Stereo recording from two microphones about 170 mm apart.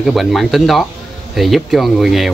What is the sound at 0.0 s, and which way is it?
Speech, centre (ahead or behind).